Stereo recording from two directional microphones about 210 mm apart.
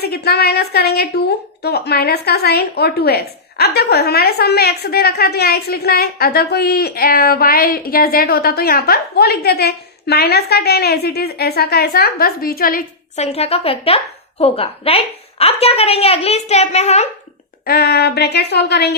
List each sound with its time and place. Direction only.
0.0 s a woman's voice: 50° left (ahead or behind)
13.2 s a woman's voice: 30° left (ahead or behind)
17.7 s a woman's voice: 50° left (ahead or behind)